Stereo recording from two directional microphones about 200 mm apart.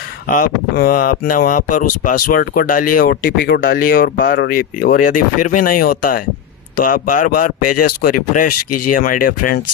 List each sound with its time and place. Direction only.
0.3 s speech: 45° left (ahead or behind)